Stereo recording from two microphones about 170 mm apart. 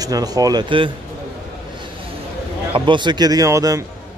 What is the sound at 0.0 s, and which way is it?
Speech, 20° right (ahead or behind).